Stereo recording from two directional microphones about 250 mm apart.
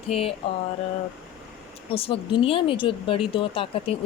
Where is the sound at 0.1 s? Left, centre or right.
Left.